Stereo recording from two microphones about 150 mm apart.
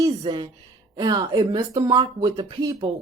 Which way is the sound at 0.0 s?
30° right (ahead or behind).